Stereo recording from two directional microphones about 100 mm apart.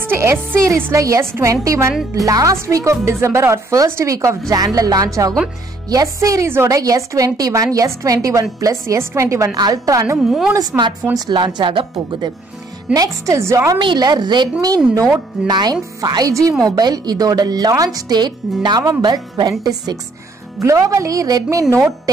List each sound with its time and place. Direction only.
0.1 s speech: 25° right (ahead or behind)
10.1 s a woman's voice: 5° right (ahead or behind)
11.1 s speech: 50° right (ahead or behind)
12.9 s speech: 35° right (ahead or behind)
13.7 s speech: 50° right (ahead or behind)
20.6 s speech: 30° right (ahead or behind)